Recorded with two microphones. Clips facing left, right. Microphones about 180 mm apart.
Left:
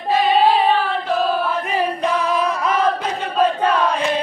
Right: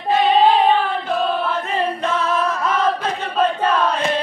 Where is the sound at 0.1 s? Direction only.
5° left (ahead or behind).